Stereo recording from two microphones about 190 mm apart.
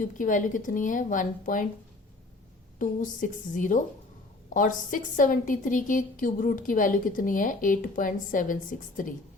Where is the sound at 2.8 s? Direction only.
45° left (ahead or behind).